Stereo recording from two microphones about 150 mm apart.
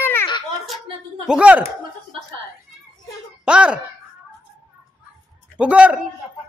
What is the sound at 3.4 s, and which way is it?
Speech, 5° right (ahead or behind).